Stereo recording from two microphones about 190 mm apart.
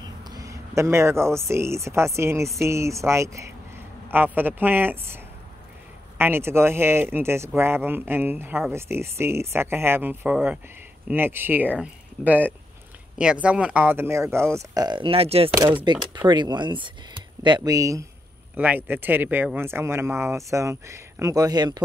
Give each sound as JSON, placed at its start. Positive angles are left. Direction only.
{"t": 0.2, "sound": "speech", "side_deg": -20}